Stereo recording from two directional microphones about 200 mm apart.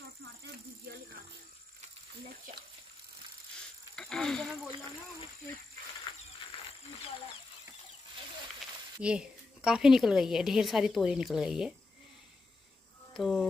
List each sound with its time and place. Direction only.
2.2 s frying: 50° right (ahead or behind)
3.9 s snake: centre (ahead or behind)
9.0 s a woman's voice: 5° right (ahead or behind)
13.1 s speech: centre (ahead or behind)